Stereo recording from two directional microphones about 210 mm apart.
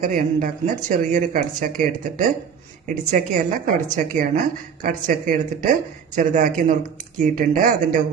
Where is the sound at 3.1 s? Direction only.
35° right (ahead or behind).